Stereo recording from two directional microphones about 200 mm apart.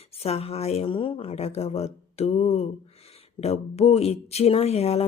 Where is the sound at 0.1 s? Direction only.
30° left (ahead or behind).